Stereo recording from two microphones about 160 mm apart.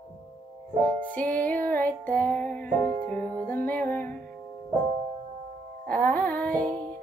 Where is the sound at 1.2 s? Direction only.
10° left (ahead or behind).